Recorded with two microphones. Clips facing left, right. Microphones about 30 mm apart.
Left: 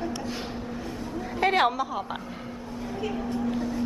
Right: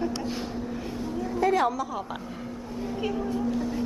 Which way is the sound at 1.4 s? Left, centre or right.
Left.